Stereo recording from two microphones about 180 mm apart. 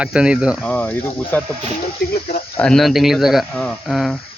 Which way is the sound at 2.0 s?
60° left (ahead or behind).